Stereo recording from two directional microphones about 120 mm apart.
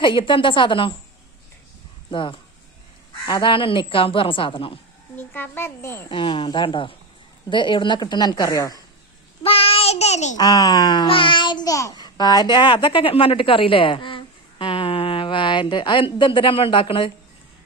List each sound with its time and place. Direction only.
0.0 s speech: 45° left (ahead or behind)
2.0 s speech: 45° left (ahead or behind)
5.1 s a child's voice: 15° left (ahead or behind)
6.1 s a woman's voice: 45° left (ahead or behind)
9.4 s child singing: 50° left (ahead or behind); by 10.3 s 70° left (ahead or behind)
10.3 s a child's voice: 30° left (ahead or behind)